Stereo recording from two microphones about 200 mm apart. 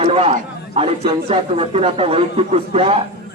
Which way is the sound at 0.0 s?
30° right (ahead or behind).